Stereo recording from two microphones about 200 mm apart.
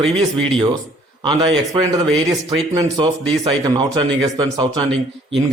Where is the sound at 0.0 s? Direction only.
Centre (ahead or behind).